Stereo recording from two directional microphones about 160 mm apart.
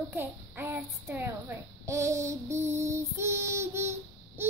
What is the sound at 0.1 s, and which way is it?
A child's voice, 15° right (ahead or behind).